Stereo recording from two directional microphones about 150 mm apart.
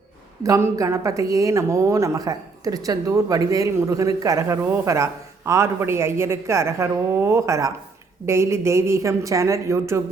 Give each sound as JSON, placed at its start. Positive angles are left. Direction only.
{"t": 0.4, "sound": "a man's voice", "side_deg": -20}